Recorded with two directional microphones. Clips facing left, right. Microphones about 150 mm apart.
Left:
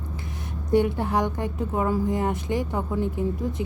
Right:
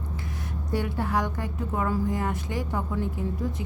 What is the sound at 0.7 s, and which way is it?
A woman's voice, 20° left (ahead or behind).